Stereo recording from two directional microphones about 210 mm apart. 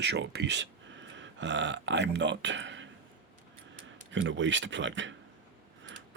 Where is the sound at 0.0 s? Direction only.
55° right (ahead or behind).